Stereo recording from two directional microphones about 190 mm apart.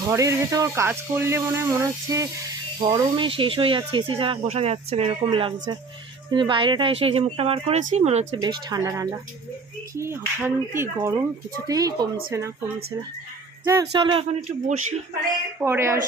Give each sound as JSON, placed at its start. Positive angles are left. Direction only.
{"t": 0.1, "sound": "speech", "side_deg": -15}
{"t": 8.4, "sound": "speech", "side_deg": -20}
{"t": 14.0, "sound": "speech", "side_deg": -30}
{"t": 15.6, "sound": "speech", "side_deg": -15}